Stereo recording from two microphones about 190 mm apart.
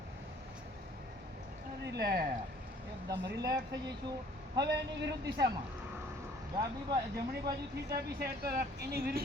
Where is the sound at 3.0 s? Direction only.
20° right (ahead or behind).